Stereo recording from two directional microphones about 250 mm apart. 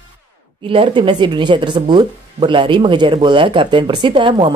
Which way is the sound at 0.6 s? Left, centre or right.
Right.